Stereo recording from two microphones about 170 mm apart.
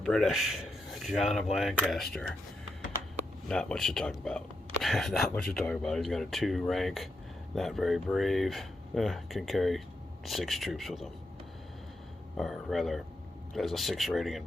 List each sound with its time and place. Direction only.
0.0 s speech: centre (ahead or behind)
3.5 s speech: 5° left (ahead or behind)
12.4 s speech: centre (ahead or behind)